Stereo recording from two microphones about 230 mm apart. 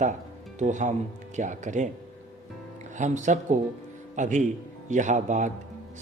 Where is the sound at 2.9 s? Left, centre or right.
Right.